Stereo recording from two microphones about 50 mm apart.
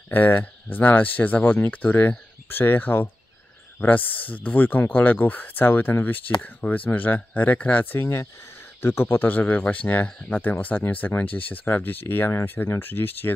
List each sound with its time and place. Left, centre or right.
0.1 s speech: left
7.8 s speech: left
9.2 s speech: left